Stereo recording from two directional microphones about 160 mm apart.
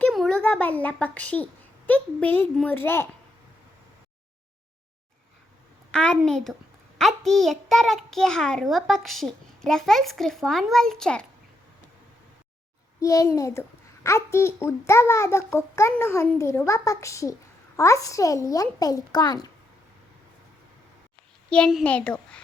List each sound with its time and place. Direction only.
0.0 s a child's voice: 5° left (ahead or behind)
5.9 s a child's voice: 5° left (ahead or behind)
13.0 s a child's voice: 20° left (ahead or behind)
21.5 s a child's voice: centre (ahead or behind)